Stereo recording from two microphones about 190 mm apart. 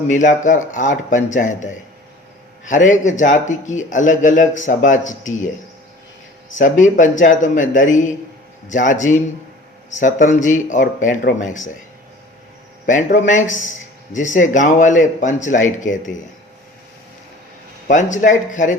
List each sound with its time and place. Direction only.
0.1 s a man's voice: 40° left (ahead or behind)
6.6 s a man's voice: 40° left (ahead or behind)
12.8 s a man's voice: 45° left (ahead or behind)
17.8 s a man's voice: 40° left (ahead or behind)